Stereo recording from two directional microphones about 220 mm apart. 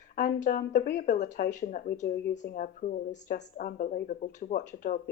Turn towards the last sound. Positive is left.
turn(degrees=35)  # may be behind; listen again after turning